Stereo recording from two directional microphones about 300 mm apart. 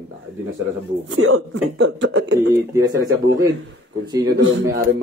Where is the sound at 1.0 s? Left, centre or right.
Right.